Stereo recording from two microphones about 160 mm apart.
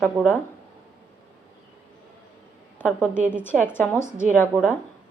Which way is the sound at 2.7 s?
10° left (ahead or behind).